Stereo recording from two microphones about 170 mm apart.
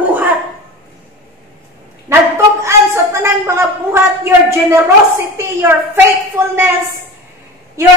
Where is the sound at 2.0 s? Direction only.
15° right (ahead or behind).